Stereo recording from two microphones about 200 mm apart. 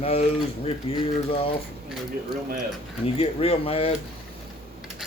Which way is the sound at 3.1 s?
30° left (ahead or behind).